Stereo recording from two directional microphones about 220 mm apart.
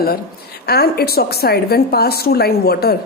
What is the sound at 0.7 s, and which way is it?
A woman's voice, 45° left (ahead or behind).